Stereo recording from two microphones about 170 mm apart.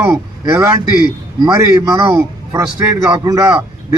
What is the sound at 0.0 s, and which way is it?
A man's voice, 15° right (ahead or behind).